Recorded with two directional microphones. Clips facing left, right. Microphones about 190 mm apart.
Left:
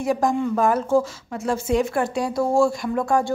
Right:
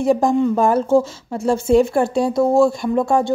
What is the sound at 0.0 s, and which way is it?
A woman's voice, 25° right (ahead or behind).